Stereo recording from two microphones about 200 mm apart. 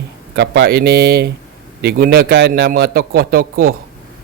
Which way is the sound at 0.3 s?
60° right (ahead or behind).